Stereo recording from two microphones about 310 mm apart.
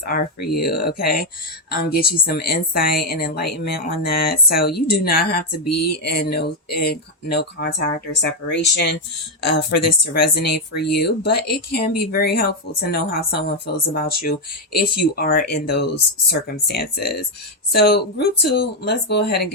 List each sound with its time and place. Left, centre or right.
0.0 s a woman's voice: left
5.5 s a sound: left
6.0 s speech: left